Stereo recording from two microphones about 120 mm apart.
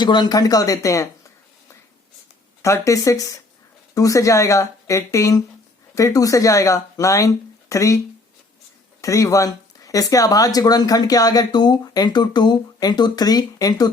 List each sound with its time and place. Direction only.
0.0 s speech: 35° left (ahead or behind)
2.6 s speech: 25° left (ahead or behind)